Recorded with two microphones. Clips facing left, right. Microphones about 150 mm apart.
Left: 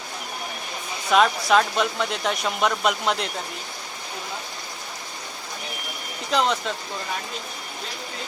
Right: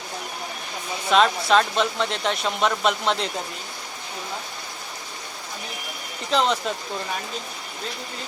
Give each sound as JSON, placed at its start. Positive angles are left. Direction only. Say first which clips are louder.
{"t": 1.1, "sound": "speech", "louder": "even", "side_deg": 5}
{"t": 6.3, "sound": "speech", "louder": "right 1 dB", "side_deg": 0}